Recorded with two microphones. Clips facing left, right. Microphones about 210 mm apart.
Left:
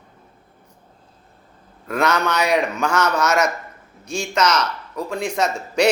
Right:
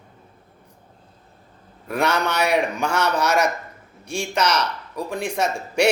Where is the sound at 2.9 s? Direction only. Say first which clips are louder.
Left 2 dB; 30° right (ahead or behind).